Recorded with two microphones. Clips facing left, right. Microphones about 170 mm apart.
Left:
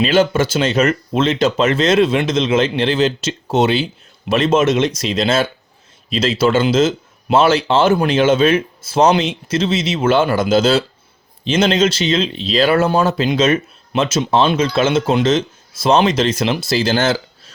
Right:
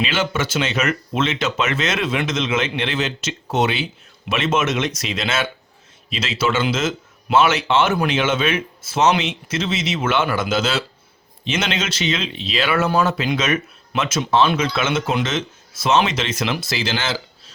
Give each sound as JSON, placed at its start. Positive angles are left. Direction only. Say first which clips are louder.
{"t": 0.0, "sound": "speech", "louder": "left 8 dB", "side_deg": 40}